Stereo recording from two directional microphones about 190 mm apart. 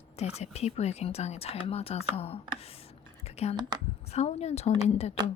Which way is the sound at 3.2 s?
35° left (ahead or behind).